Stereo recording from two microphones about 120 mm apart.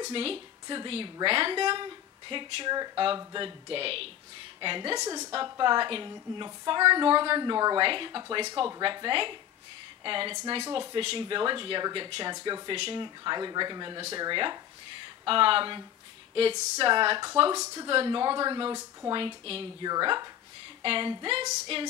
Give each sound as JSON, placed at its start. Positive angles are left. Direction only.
{"t": 0.1, "sound": "speech", "side_deg": -50}
{"t": 4.9, "sound": "a woman's voice", "side_deg": -30}
{"t": 5.3, "sound": "a woman's voice", "side_deg": -40}
{"t": 19.1, "sound": "speech", "side_deg": -50}
{"t": 19.8, "sound": "a woman's voice", "side_deg": -35}
{"t": 20.8, "sound": "speech", "side_deg": -45}